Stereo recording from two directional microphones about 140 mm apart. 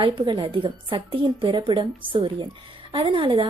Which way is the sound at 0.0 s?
35° right (ahead or behind).